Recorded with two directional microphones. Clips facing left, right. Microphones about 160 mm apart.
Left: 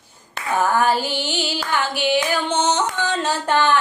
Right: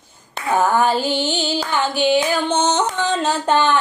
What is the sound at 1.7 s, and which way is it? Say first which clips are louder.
Singing: right 3 dB; 20° right (ahead or behind).